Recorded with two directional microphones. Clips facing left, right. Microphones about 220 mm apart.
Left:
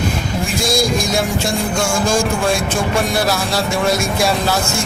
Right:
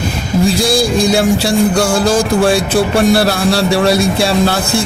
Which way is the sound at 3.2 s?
70° right (ahead or behind).